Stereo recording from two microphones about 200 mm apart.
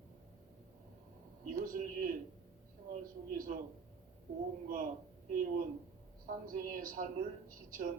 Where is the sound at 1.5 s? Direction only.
45° right (ahead or behind).